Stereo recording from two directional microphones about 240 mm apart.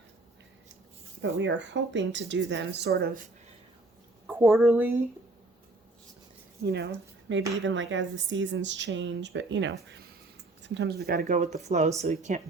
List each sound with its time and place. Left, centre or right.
1.2 s speech: right
4.3 s a woman's voice: centre
6.7 s speech: right